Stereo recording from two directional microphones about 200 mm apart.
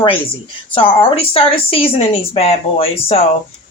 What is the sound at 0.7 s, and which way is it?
Speech, 25° left (ahead or behind).